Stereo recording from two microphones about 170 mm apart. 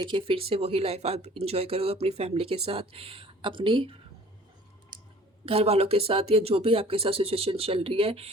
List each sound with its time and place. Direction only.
0.0 s speech: 30° right (ahead or behind)
5.5 s speech: 35° right (ahead or behind)